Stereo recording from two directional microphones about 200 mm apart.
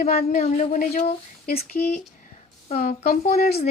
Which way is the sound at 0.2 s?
35° left (ahead or behind).